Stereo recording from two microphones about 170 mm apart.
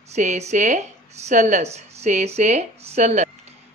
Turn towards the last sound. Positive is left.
turn(degrees=-40)  # may be behind; listen again after turning